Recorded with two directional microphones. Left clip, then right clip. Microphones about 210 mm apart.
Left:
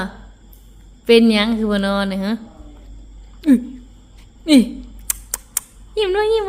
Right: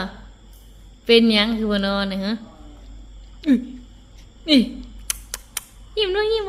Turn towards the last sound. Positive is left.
turn(degrees=15)  # may be behind; listen again after turning